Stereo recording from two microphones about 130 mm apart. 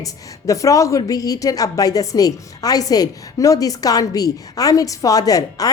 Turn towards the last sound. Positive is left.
turn(degrees=30)  # may be behind; listen again after turning